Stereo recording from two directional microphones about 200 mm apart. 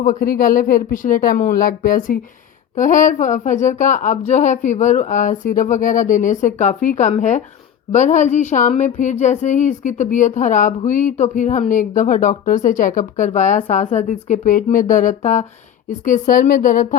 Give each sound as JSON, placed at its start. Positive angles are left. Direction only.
{"t": 0.0, "sound": "a woman's voice", "side_deg": 40}